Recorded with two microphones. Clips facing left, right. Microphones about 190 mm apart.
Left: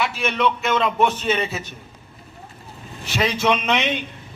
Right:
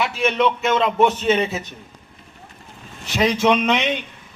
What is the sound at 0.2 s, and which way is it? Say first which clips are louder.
A man's voice: right 6 dB; 20° right (ahead or behind).